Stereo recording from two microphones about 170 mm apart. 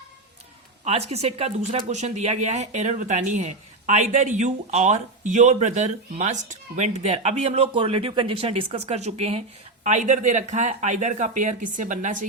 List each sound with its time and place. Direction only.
0.9 s speech: 40° right (ahead or behind)